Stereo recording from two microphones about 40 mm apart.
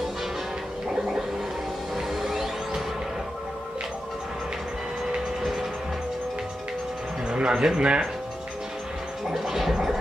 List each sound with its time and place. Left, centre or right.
2.0 s music: centre
7.2 s speech: right
9.3 s gargling: centre